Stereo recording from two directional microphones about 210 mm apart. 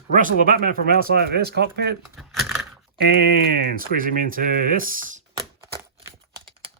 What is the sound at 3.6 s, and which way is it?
Speech, 40° right (ahead or behind).